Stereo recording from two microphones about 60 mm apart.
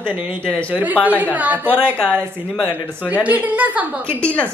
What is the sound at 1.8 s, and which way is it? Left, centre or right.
Speech, centre.